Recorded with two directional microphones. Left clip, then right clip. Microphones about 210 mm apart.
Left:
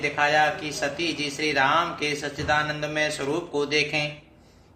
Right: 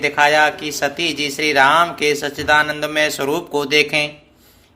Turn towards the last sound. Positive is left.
turn(degrees=-50)  # may be behind; listen again after turning